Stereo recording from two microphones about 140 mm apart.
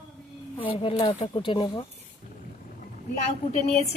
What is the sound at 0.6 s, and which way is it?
Speech, 40° left (ahead or behind).